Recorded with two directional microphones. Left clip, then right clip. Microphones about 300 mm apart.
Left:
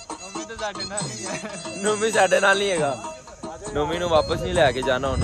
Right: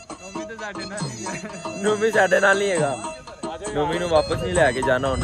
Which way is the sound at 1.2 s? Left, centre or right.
Centre.